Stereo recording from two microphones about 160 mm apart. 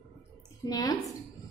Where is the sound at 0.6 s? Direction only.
25° left (ahead or behind).